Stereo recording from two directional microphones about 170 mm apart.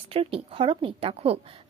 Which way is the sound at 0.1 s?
35° right (ahead or behind).